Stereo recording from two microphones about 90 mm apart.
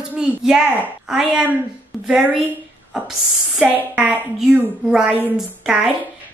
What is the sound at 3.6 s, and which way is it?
A woman's voice, 20° right (ahead or behind).